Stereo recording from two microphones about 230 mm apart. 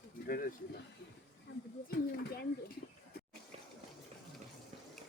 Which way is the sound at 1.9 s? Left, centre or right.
Left.